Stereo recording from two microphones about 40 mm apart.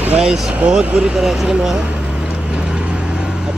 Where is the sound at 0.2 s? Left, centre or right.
Centre.